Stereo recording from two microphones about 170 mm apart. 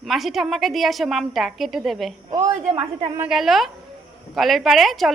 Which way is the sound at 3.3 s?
Centre (ahead or behind).